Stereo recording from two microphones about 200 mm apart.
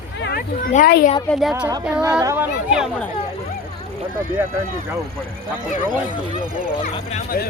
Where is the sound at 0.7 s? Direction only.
45° left (ahead or behind).